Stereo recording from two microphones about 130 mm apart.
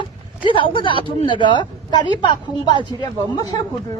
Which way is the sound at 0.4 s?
40° left (ahead or behind).